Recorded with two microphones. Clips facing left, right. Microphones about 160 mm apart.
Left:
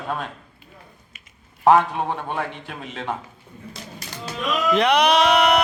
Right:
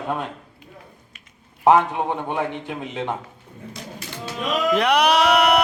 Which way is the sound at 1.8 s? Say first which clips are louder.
Right 2 dB; 20° right (ahead or behind).